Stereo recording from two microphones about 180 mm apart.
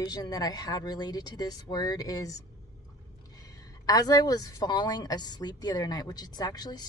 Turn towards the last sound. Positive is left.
turn(degrees=20)  # may be behind; listen again after turning